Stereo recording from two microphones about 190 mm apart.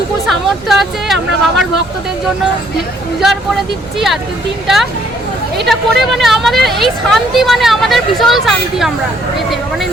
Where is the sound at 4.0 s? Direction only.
Centre (ahead or behind).